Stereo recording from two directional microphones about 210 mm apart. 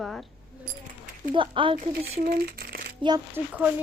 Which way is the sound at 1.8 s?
40° right (ahead or behind).